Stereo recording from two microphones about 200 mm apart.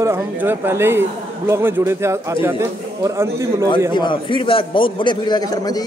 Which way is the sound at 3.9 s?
25° left (ahead or behind).